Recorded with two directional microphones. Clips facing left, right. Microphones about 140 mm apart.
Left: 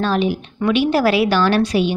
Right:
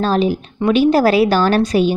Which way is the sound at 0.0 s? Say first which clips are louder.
Right 2 dB; 40° right (ahead or behind).